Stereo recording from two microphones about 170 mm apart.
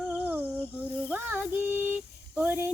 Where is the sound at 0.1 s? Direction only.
10° right (ahead or behind).